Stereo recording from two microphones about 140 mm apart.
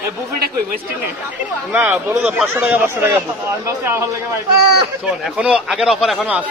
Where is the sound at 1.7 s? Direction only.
10° right (ahead or behind).